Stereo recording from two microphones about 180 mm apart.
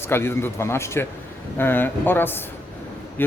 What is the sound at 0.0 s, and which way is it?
A woman's voice, 15° left (ahead or behind).